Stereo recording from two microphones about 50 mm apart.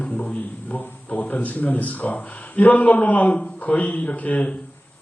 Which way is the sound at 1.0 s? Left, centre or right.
Left.